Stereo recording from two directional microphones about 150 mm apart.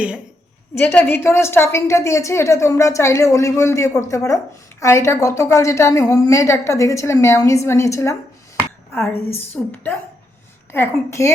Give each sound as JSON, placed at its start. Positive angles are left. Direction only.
{"t": 0.8, "sound": "a woman's voice", "side_deg": 15}
{"t": 10.7, "sound": "a woman's voice", "side_deg": 15}